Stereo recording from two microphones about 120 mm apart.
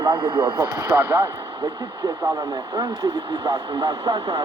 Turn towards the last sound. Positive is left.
turn(degrees=-50)  # may be behind; listen again after turning